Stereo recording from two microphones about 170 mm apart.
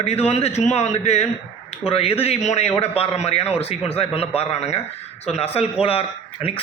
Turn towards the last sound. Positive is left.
turn(degrees=35)  # may be behind; listen again after turning